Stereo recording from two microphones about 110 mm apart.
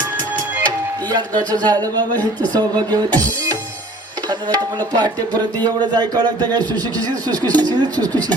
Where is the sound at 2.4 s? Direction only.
40° right (ahead or behind).